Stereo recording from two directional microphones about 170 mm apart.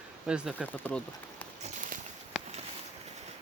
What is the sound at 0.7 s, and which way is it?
Speech, 10° left (ahead or behind).